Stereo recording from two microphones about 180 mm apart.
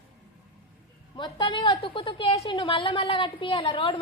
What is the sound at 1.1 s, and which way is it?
A woman's voice, 25° left (ahead or behind).